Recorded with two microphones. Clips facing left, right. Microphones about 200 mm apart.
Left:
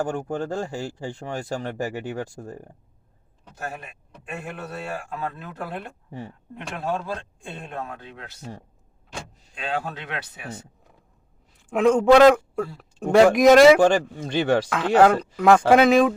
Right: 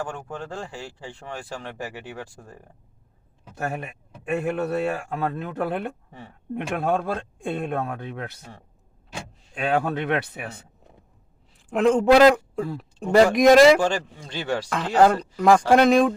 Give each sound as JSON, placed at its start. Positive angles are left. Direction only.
{"t": 0.0, "sound": "speech", "side_deg": 45}
{"t": 4.3, "sound": "speech", "side_deg": -60}
{"t": 9.6, "sound": "speech", "side_deg": -55}
{"t": 11.7, "sound": "speech", "side_deg": 0}
{"t": 13.7, "sound": "speech", "side_deg": 55}
{"t": 14.7, "sound": "speech", "side_deg": 0}